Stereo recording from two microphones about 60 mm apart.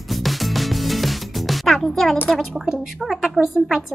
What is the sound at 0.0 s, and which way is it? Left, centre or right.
Music, centre.